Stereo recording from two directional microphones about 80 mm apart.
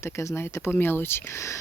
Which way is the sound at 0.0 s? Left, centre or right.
Left.